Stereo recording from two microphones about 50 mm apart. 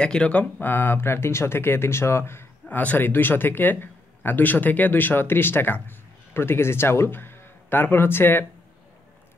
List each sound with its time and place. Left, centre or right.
0.0 s speech: centre
0.6 s speech: left
0.9 s speech: left
2.7 s speech: left
3.0 s speech: left